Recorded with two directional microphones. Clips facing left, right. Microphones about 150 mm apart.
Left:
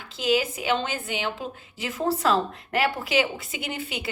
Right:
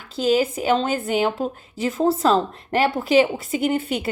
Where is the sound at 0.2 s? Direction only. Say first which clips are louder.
Right 5 dB; 35° right (ahead or behind).